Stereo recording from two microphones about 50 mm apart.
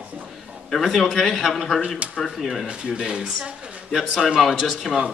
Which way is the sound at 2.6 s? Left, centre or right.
Centre.